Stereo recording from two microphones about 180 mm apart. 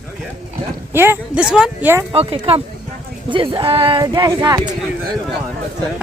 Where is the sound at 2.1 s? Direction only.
35° right (ahead or behind).